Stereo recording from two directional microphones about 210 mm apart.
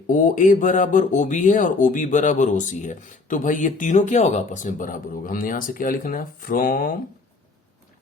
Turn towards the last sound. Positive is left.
turn(degrees=40)  # may be behind; listen again after turning